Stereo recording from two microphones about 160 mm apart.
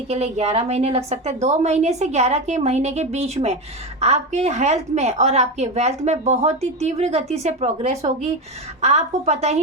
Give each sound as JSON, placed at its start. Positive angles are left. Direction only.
{"t": 0.1, "sound": "a woman's voice", "side_deg": -40}